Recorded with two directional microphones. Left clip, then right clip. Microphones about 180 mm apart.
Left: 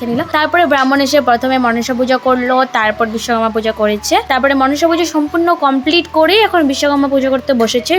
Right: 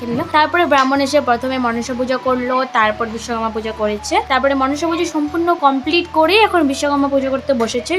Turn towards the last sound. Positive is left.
turn(degrees=20)  # may be behind; listen again after turning